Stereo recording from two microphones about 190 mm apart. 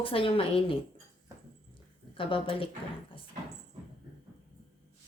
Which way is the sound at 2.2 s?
30° left (ahead or behind).